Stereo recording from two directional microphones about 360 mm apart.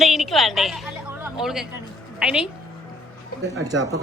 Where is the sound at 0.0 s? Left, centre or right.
Centre.